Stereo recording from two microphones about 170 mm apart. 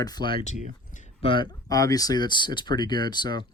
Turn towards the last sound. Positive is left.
turn(degrees=25)  # may be behind; listen again after turning